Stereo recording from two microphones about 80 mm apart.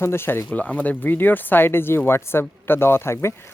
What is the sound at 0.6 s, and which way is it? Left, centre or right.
Speech, centre.